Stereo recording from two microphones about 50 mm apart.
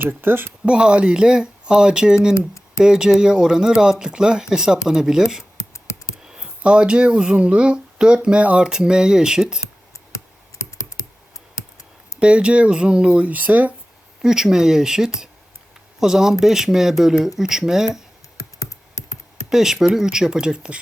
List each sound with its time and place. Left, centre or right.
0.0 s speech: right
0.6 s speech: right
5.5 s a sound: left
6.2 s a sound: centre
6.6 s speech: right
12.2 s speech: right
14.2 s speech: centre
19.5 s speech: centre